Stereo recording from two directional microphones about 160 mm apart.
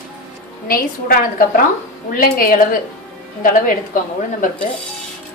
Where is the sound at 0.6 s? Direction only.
65° left (ahead or behind).